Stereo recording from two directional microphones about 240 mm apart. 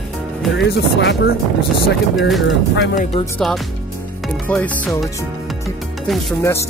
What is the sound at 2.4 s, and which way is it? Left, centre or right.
Speech, left.